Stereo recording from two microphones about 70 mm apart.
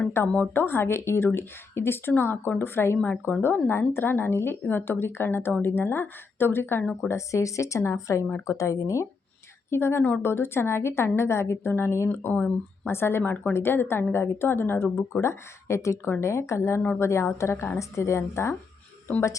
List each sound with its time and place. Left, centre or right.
0.5 s a woman's voice: left
3.0 s a woman's voice: centre
3.7 s a woman's voice: left
7.1 s speech: left
9.6 s a woman's voice: left